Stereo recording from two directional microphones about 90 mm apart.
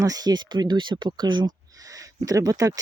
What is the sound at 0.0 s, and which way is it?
Speech, 45° right (ahead or behind).